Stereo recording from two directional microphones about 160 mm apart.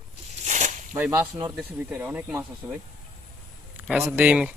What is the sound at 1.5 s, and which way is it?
Speech, 10° right (ahead or behind).